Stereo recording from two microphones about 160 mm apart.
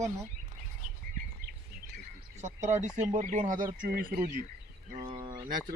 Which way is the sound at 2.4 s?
45° right (ahead or behind).